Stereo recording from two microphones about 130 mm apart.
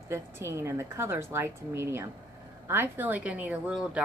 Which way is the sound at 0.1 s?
20° right (ahead or behind).